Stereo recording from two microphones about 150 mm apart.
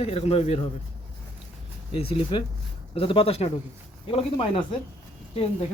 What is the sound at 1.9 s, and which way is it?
A man's voice, 40° left (ahead or behind).